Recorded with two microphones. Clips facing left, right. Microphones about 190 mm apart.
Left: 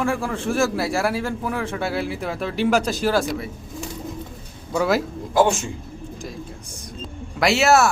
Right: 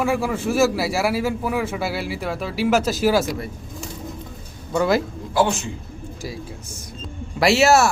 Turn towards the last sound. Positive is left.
turn(degrees=0)  # may be behind; listen again after turning